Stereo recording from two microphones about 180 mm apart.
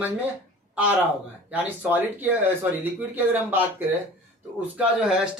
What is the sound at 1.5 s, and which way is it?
Speech, 10° right (ahead or behind).